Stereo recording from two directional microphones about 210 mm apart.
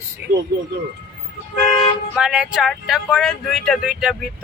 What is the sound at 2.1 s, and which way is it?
Speech, 5° right (ahead or behind).